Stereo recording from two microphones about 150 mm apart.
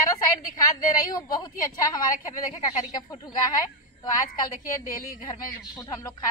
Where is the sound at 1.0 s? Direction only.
25° left (ahead or behind).